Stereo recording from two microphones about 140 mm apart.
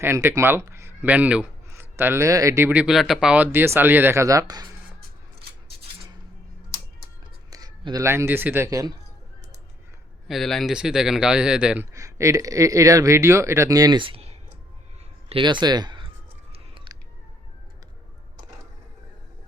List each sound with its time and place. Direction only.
0.0 s speech: 20° right (ahead or behind)
2.6 s speech: 5° right (ahead or behind); by 4.7 s 25° right (ahead or behind)
7.5 s speech: 25° right (ahead or behind)
10.2 s speech: centre (ahead or behind)
11.9 s speech: 20° right (ahead or behind)
16.5 s chewing: 40° right (ahead or behind)